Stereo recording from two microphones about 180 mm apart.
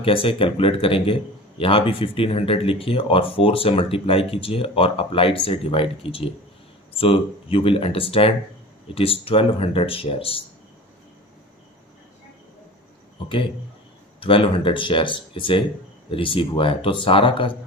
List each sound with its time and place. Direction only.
0.0 s speech: 30° left (ahead or behind)
13.2 s speech: 30° left (ahead or behind)